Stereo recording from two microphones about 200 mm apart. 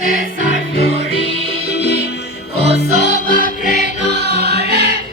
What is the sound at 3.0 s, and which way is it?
Music, 50° left (ahead or behind).